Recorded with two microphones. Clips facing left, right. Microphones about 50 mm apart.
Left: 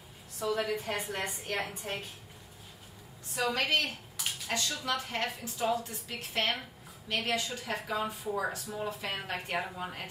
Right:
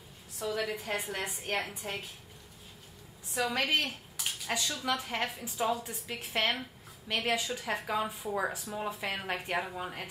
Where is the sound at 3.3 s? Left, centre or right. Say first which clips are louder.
Even; centre.